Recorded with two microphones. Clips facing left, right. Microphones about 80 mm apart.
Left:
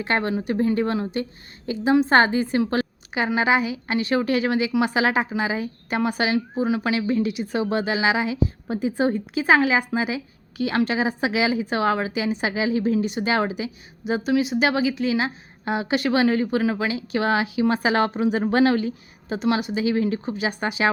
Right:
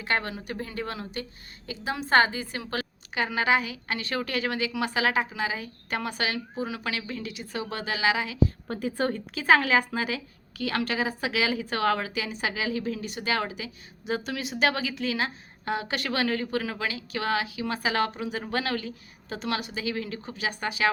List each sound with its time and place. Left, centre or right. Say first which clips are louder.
0.0 s a woman's voice: left 6 dB; left
3.2 s a woman's voice: left 4 dB; centre
14.0 s a woman's voice: left 9 dB; centre